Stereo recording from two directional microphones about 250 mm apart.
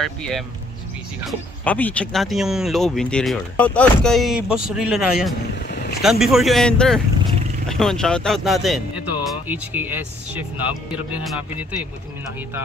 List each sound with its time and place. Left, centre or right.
0.0 s speech: centre
5.7 s vehicle: left
6.0 s speech: centre